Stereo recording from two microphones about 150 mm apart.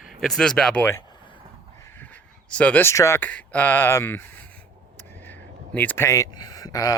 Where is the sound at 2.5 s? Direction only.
10° left (ahead or behind).